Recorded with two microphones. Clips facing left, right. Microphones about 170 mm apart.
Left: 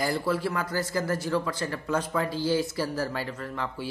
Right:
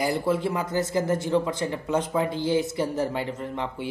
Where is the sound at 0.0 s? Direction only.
20° right (ahead or behind).